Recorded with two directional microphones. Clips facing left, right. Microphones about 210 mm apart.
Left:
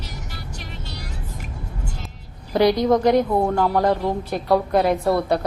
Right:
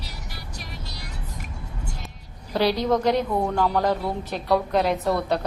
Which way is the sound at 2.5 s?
15° left (ahead or behind).